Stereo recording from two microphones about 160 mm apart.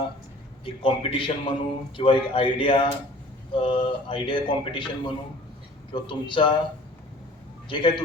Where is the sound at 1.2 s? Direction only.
30° left (ahead or behind).